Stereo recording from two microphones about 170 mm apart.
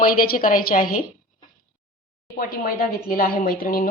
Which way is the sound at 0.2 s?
55° left (ahead or behind).